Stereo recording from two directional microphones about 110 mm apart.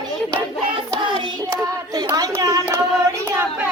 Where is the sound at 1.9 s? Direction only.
35° right (ahead or behind).